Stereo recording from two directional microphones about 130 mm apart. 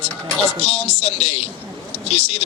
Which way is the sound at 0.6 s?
50° left (ahead or behind).